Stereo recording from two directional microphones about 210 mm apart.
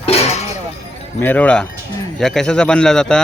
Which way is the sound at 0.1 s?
30° left (ahead or behind).